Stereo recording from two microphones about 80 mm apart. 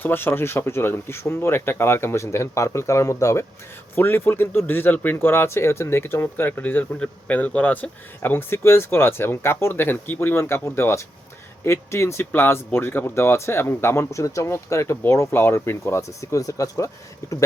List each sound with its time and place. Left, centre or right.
0.0 s speech: left
3.9 s speech: left